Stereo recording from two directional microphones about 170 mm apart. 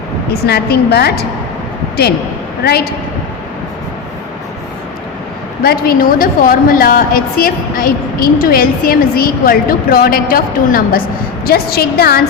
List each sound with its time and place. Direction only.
0.4 s a woman's voice: 70° left (ahead or behind)
5.6 s a woman's voice: 60° left (ahead or behind)